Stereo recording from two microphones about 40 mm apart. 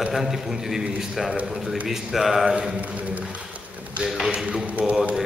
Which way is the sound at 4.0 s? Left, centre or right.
Centre.